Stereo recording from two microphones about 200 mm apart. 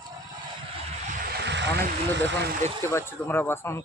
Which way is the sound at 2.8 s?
15° left (ahead or behind).